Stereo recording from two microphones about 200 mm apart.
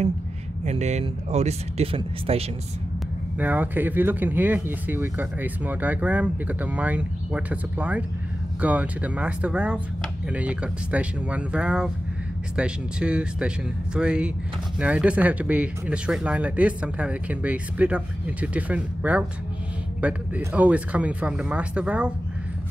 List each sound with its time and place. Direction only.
0.7 s speech: 35° right (ahead or behind)
3.3 s speech: 10° right (ahead or behind)